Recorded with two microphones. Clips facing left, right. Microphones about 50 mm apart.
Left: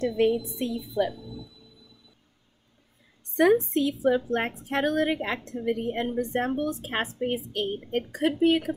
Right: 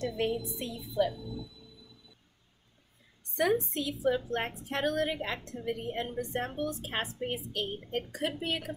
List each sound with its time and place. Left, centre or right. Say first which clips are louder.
0.6 s a woman's voice: left 4 dB; left
3.3 s a woman's voice: left 8 dB; left